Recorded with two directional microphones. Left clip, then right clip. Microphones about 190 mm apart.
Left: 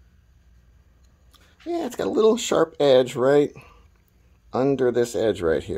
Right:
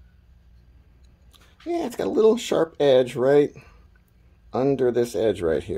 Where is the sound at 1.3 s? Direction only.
5° left (ahead or behind).